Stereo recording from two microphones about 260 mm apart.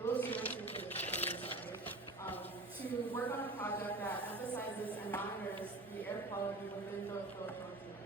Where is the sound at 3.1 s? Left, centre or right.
Centre.